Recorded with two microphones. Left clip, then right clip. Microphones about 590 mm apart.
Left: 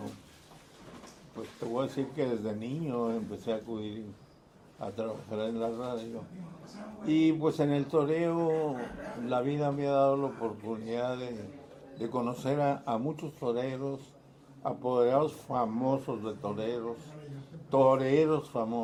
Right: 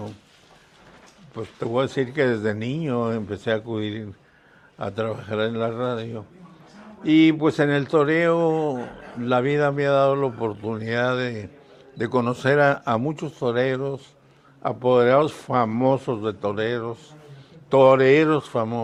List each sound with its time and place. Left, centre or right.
1.7 s speech: right
7.0 s speech: right